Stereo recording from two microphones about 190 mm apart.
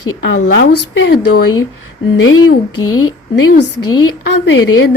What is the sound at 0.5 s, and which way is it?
Speech, 65° left (ahead or behind).